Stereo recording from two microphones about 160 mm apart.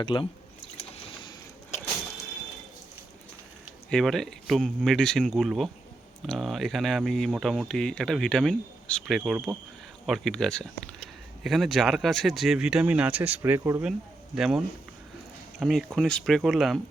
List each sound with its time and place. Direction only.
0.0 s speech: 30° left (ahead or behind)
0.8 s boat: 35° left (ahead or behind)
3.8 s speech: 5° left (ahead or behind); by 13.9 s 15° right (ahead or behind)
14.3 s speech: 5° right (ahead or behind)